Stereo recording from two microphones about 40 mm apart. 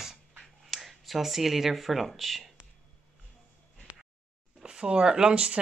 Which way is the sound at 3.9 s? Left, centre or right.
Right.